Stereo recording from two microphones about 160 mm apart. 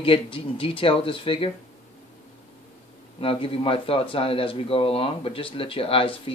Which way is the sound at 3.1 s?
35° left (ahead or behind).